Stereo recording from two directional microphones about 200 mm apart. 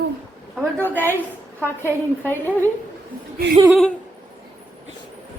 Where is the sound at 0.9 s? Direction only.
10° left (ahead or behind).